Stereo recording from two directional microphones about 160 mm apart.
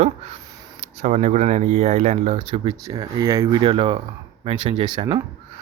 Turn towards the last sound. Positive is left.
turn(degrees=-30)  # may be behind; listen again after turning